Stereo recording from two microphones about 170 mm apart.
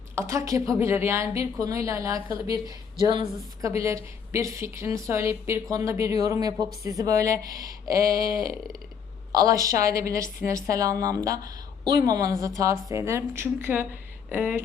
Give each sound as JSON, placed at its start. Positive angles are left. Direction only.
{"t": 0.2, "sound": "a woman's voice", "side_deg": -20}
{"t": 7.9, "sound": "a sound", "side_deg": -60}
{"t": 9.3, "sound": "a woman's voice", "side_deg": -20}